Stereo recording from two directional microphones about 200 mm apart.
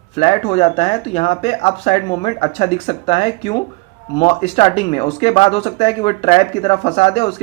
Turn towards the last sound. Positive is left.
turn(degrees=30)  # may be behind; listen again after turning